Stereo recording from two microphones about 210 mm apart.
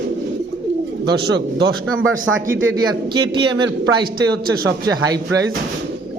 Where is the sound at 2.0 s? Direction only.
70° right (ahead or behind).